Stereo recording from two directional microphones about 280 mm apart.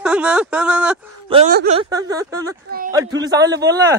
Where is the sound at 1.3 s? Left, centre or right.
Right.